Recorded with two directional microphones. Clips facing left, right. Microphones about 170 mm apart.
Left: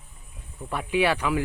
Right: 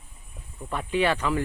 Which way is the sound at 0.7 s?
10° left (ahead or behind).